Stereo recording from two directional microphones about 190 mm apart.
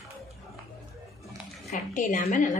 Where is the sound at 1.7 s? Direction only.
45° left (ahead or behind).